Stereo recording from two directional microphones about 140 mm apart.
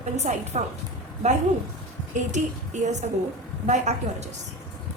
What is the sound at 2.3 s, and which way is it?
A woman's voice, 60° right (ahead or behind).